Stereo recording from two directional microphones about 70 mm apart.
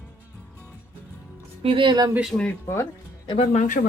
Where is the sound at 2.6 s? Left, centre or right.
Left.